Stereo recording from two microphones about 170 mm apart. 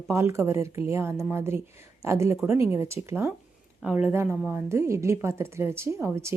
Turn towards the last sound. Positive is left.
turn(degrees=-15)  # may be behind; listen again after turning